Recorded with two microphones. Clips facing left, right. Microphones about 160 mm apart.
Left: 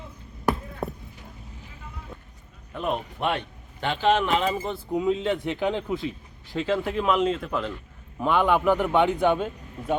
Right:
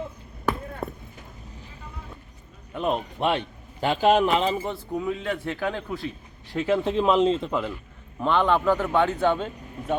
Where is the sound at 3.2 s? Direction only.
30° right (ahead or behind).